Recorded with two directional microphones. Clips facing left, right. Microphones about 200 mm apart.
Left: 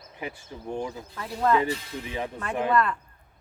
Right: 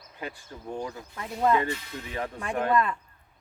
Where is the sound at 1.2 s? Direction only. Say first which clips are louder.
Left 1 dB; 10° right (ahead or behind).